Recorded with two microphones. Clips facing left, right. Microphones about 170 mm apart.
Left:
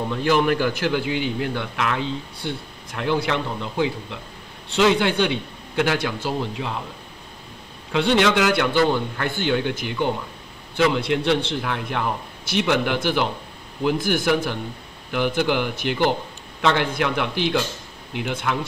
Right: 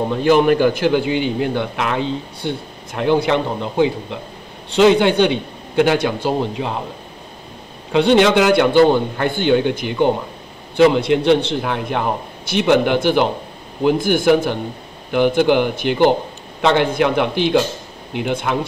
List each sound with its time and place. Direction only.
0.0 s a man's voice: 20° right (ahead or behind)
7.9 s a man's voice: 20° right (ahead or behind)